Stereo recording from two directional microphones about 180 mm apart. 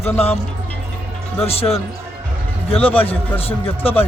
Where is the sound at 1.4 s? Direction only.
35° left (ahead or behind).